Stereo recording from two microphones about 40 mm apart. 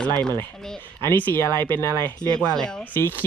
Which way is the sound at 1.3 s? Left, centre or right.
Left.